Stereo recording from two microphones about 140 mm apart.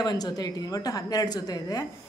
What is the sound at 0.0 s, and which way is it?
A woman's voice, 30° left (ahead or behind).